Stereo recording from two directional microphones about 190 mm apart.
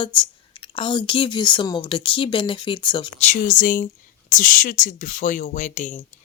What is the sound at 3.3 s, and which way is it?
Speech, 45° left (ahead or behind).